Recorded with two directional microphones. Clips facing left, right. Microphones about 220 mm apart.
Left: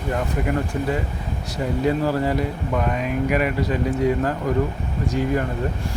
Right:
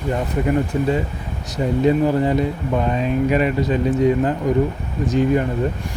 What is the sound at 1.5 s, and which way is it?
Speech, 20° right (ahead or behind).